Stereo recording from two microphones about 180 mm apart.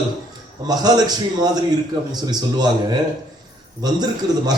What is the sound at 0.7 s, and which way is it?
A man's voice, 20° right (ahead or behind).